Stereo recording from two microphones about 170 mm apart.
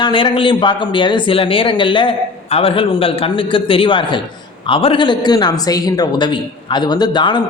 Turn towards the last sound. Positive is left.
turn(degrees=25)  # may be behind; listen again after turning